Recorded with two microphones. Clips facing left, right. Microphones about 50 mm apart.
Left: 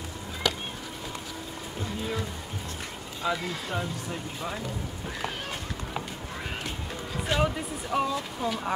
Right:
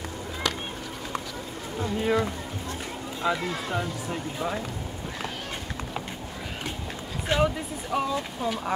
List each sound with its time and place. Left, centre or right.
1.8 s speech: right
3.2 s speech: centre
7.3 s speech: centre